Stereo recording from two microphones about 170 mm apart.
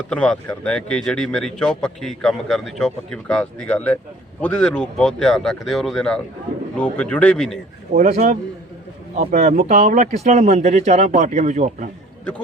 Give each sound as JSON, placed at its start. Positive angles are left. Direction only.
{"t": 0.1, "sound": "a man's voice", "side_deg": 5}
{"t": 7.9, "sound": "speech", "side_deg": -40}